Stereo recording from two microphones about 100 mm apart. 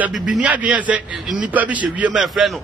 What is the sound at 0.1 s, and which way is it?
A man's voice, 10° right (ahead or behind).